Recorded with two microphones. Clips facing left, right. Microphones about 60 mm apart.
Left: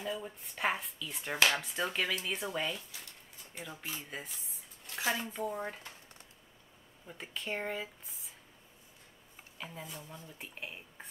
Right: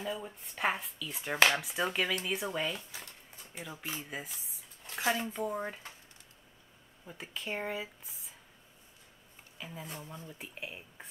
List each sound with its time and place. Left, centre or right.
0.0 s speech: centre
3.5 s speech: centre
4.0 s speech: centre
7.1 s speech: centre
9.6 s speech: centre
10.0 s speech: right
10.4 s speech: centre